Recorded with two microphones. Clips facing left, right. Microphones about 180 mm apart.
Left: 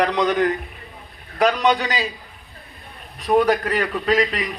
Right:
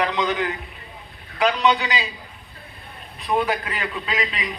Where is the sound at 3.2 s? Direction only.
50° left (ahead or behind).